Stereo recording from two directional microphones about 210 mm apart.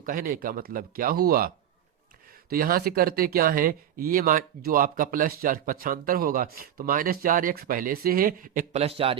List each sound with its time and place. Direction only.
0.0 s speech: 45° right (ahead or behind); by 9.1 s 25° right (ahead or behind)